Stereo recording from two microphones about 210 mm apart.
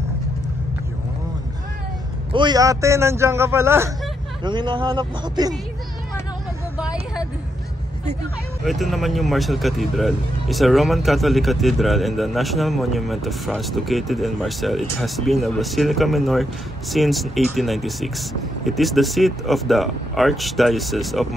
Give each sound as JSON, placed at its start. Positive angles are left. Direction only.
{"t": 2.3, "sound": "speech", "side_deg": -20}
{"t": 6.8, "sound": "vehicle", "side_deg": -5}
{"t": 8.6, "sound": "speech", "side_deg": 0}